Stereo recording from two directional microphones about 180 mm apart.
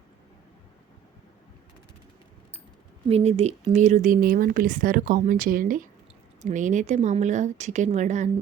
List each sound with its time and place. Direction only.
3.1 s speech: 35° right (ahead or behind)